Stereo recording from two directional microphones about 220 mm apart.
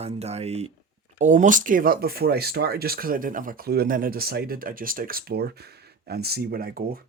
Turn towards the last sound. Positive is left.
turn(degrees=-45)  # may be behind; listen again after turning